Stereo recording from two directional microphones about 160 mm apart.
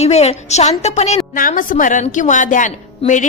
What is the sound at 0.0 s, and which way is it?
A woman's voice, 40° left (ahead or behind).